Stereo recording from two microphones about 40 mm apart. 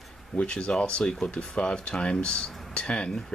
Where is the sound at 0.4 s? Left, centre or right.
Left.